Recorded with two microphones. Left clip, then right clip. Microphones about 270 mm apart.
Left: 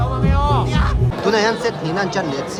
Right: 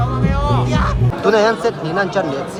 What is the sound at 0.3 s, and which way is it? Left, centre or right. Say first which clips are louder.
Music: left 2 dB; centre.